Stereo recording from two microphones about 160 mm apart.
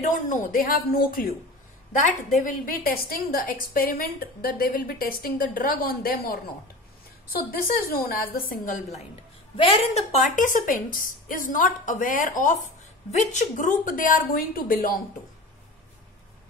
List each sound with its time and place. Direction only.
0.3 s a woman's voice: 55° left (ahead or behind)
9.6 s a woman's voice: 40° left (ahead or behind); by 15.0 s 65° left (ahead or behind)